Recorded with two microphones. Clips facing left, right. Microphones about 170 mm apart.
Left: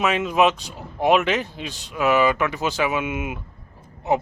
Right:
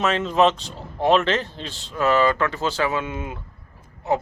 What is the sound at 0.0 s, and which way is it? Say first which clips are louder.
Speech: even; 10° left (ahead or behind).